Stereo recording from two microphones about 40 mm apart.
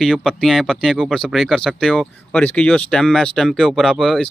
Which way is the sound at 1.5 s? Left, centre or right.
Centre.